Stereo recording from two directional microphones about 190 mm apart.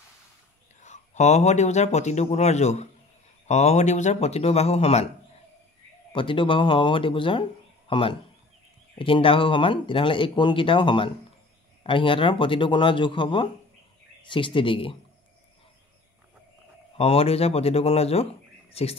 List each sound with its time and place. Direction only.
0.7 s speech: 40° left (ahead or behind)
6.1 s speech: 25° left (ahead or behind)
16.9 s speech: 30° left (ahead or behind)